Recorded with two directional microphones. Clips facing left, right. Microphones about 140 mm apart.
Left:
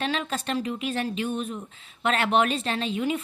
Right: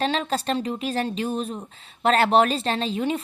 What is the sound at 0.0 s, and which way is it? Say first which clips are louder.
Speech: right 4 dB; 35° right (ahead or behind).